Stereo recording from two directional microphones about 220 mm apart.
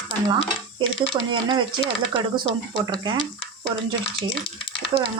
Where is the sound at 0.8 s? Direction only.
25° right (ahead or behind).